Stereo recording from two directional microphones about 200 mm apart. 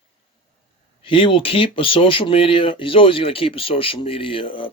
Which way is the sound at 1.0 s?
25° left (ahead or behind).